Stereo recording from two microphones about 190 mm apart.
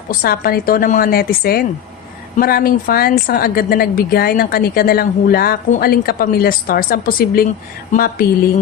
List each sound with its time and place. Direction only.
0.1 s a woman's voice: 50° left (ahead or behind)
7.9 s a woman's voice: 40° left (ahead or behind)